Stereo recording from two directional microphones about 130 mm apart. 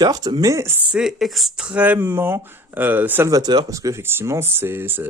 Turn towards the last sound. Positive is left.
turn(degrees=-15)  # may be behind; listen again after turning